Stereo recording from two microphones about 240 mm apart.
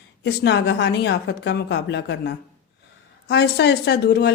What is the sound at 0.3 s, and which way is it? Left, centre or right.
Speech, left.